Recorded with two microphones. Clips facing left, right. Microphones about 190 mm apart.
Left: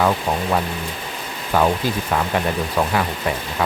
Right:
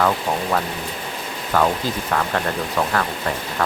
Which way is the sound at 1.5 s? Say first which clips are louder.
Left 1 dB; 15° left (ahead or behind).